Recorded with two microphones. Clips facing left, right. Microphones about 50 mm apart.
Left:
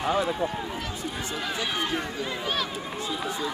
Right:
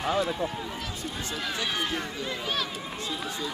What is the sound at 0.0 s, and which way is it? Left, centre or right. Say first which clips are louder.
Speech: left 2 dB; centre.